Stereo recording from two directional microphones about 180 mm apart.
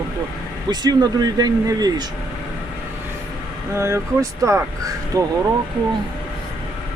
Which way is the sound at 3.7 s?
15° right (ahead or behind).